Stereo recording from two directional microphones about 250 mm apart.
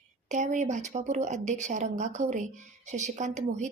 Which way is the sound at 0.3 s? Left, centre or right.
Right.